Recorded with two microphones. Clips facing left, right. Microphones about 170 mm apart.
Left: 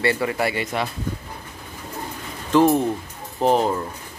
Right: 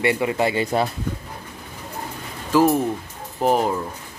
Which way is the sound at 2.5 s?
5° right (ahead or behind).